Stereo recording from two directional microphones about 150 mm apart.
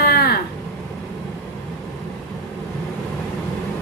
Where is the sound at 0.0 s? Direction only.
90° left.